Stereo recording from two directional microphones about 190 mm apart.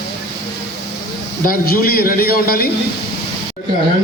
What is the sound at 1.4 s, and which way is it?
A man's voice, 50° left (ahead or behind).